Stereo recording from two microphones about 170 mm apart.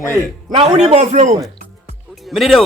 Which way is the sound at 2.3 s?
Centre (ahead or behind).